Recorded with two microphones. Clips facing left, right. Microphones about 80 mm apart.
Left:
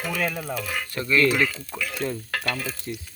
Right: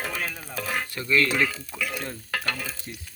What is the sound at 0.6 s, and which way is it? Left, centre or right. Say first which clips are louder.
Speech: right 1 dB; right.